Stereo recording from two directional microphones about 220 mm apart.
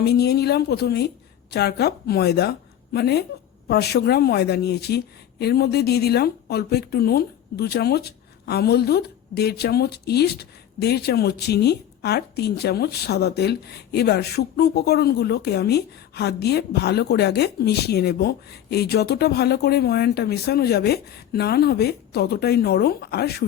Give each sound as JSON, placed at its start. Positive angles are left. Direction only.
{"t": 0.0, "sound": "a woman's voice", "side_deg": 45}